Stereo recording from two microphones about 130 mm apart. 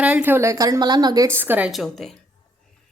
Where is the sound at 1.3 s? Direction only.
15° right (ahead or behind).